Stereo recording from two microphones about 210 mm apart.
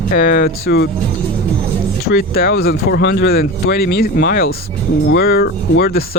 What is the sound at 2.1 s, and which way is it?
Speech, 45° left (ahead or behind).